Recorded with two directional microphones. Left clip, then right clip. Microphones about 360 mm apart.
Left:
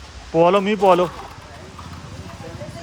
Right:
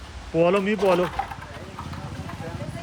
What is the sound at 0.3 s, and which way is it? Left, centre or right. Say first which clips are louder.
Speech: left 5 dB; centre.